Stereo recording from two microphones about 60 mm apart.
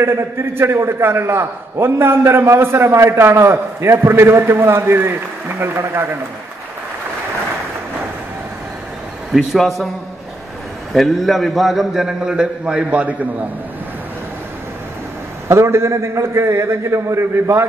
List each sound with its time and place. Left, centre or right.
0.0 s a man's voice: right
9.3 s a man's voice: centre
10.9 s a man's voice: centre; by 13.3 s right
15.4 s a man's voice: right